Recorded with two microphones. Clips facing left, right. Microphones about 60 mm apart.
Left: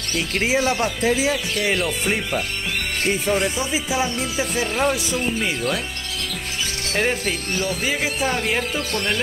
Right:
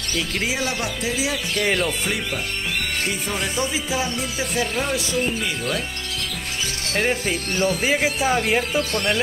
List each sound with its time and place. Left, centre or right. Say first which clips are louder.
0.4 s speech: left 7 dB; left
1.6 s speech: right 3 dB; centre
3.3 s speech: left 3 dB; centre
6.9 s speech: even; centre
7.5 s speech: right 5 dB; right
8.2 s speech: right 2 dB; centre